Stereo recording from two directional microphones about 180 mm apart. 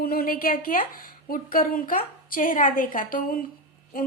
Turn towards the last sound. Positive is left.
turn(degrees=50)  # may be behind; listen again after turning